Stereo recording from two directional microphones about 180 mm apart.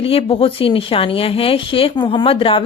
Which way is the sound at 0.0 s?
30° left (ahead or behind).